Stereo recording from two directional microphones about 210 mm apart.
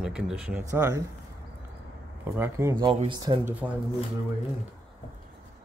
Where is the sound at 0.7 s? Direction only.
15° right (ahead or behind).